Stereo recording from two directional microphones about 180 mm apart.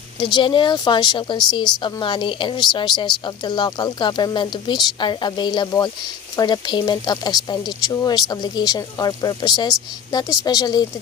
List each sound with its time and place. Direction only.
0.3 s speech: 25° left (ahead or behind)